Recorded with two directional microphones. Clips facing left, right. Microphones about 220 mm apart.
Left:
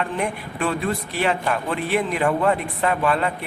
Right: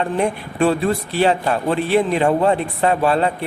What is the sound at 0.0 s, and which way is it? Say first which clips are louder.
A man's voice: right 5 dB; 30° right (ahead or behind).